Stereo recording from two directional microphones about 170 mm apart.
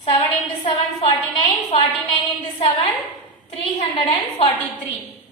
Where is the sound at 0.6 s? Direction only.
35° left (ahead or behind).